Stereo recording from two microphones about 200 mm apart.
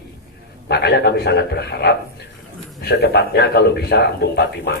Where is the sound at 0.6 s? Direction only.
55° left (ahead or behind).